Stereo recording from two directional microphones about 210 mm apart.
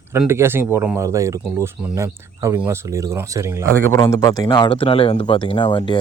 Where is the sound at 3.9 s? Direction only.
15° left (ahead or behind).